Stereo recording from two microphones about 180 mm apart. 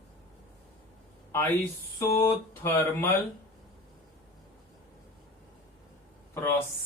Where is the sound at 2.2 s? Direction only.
15° left (ahead or behind).